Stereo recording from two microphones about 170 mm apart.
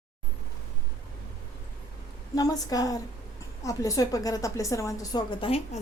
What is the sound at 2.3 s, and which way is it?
A woman's voice, 20° left (ahead or behind).